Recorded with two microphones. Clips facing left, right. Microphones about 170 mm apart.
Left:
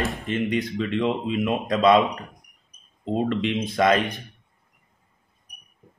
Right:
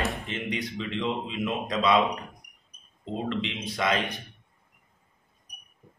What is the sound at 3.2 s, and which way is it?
Speech, 50° left (ahead or behind).